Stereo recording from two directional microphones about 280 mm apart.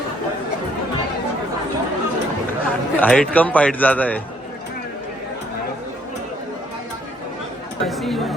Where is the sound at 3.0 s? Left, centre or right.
Centre.